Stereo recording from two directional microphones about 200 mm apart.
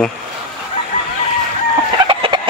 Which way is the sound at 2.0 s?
25° right (ahead or behind).